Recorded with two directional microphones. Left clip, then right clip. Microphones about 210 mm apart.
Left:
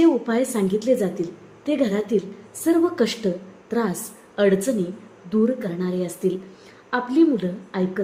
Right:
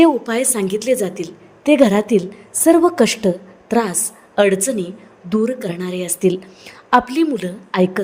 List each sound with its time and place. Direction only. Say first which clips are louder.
0.0 s a woman's voice: right 5 dB; 35° right (ahead or behind)